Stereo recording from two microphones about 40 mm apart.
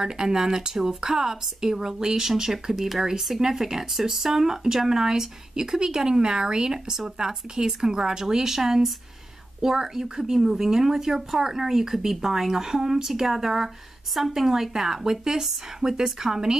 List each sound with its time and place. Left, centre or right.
0.0 s speech: centre